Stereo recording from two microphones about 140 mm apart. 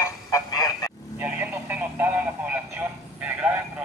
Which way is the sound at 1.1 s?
10° right (ahead or behind).